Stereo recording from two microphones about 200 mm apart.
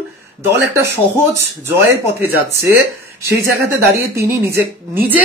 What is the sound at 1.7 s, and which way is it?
Speech, 10° right (ahead or behind).